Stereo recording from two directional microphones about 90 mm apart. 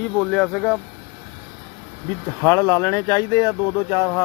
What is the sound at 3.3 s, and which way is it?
Speech, 40° left (ahead or behind).